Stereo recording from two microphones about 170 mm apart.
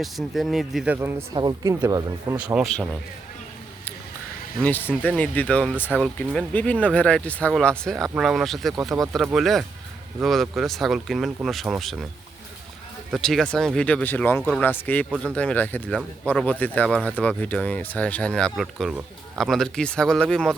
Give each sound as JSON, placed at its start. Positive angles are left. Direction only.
{"t": 0.0, "sound": "speech", "side_deg": 0}
{"t": 0.9, "sound": "speech", "side_deg": -20}
{"t": 2.3, "sound": "speech", "side_deg": -5}
{"t": 4.6, "sound": "speech", "side_deg": 10}
{"t": 13.1, "sound": "speech", "side_deg": 0}